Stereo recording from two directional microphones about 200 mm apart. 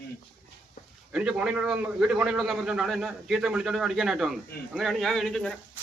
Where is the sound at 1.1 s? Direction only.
5° right (ahead or behind).